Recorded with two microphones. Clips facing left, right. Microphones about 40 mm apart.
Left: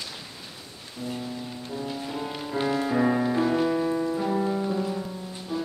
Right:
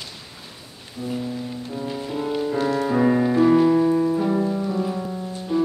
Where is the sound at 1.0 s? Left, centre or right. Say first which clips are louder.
Right 5 dB; centre.